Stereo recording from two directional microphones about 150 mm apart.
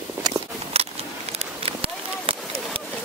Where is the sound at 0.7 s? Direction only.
45° right (ahead or behind).